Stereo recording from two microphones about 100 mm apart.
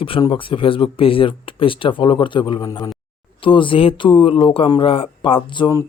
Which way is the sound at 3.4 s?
60° left (ahead or behind).